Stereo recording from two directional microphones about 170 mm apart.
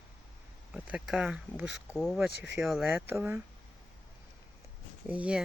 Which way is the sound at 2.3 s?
75° left (ahead or behind).